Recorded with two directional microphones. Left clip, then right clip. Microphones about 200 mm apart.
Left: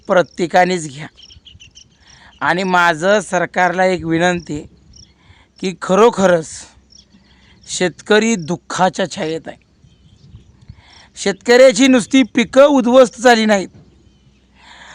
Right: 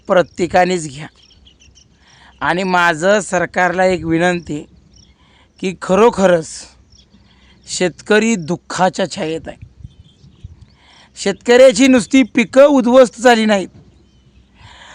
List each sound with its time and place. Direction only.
0.0 s speech: centre (ahead or behind)
1.5 s bird: 45° left (ahead or behind)
2.0 s speech: centre (ahead or behind)
10.8 s speech: centre (ahead or behind)
14.6 s dog: centre (ahead or behind)